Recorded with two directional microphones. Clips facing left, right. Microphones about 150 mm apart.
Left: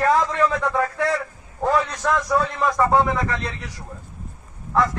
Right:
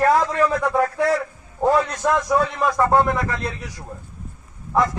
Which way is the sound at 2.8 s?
Centre (ahead or behind).